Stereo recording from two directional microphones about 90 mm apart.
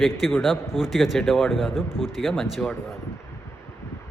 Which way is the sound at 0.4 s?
5° right (ahead or behind).